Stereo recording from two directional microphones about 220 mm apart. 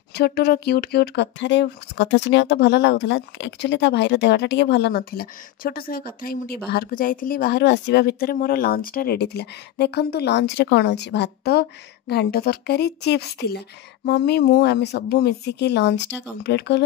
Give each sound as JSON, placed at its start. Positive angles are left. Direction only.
{"t": 0.1, "sound": "speech", "side_deg": 45}